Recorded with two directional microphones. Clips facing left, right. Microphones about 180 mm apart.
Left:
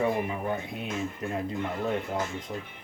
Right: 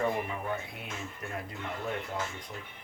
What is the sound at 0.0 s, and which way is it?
Speech, 15° left (ahead or behind).